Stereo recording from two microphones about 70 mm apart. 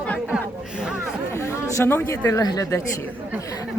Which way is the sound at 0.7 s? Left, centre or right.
Centre.